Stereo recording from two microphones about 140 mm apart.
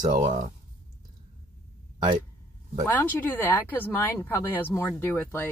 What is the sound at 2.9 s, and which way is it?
Speech, 15° left (ahead or behind).